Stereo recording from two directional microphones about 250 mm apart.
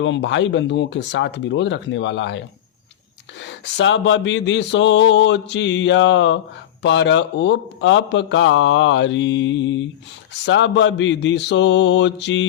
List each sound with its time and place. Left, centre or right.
0.0 s speech: left
3.4 s speech: left